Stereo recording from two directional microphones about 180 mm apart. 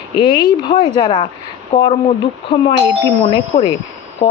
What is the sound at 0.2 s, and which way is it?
Speech, 25° left (ahead or behind).